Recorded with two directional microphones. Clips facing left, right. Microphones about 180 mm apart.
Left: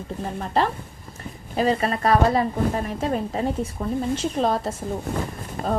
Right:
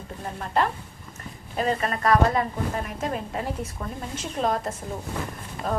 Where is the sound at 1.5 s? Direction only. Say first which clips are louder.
Left 4 dB; 30° left (ahead or behind).